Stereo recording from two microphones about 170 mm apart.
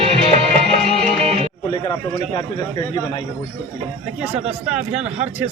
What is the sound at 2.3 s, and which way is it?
Speech, 25° left (ahead or behind).